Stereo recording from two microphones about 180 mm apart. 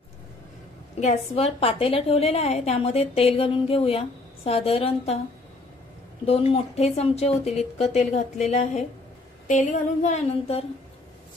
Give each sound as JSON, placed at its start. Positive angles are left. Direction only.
{"t": 0.9, "sound": "a woman's voice", "side_deg": 35}
{"t": 6.2, "sound": "a woman's voice", "side_deg": 35}